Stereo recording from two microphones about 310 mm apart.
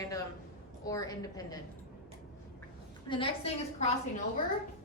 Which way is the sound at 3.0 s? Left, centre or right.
Centre.